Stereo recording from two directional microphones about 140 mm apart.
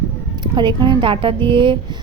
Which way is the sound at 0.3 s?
35° right (ahead or behind).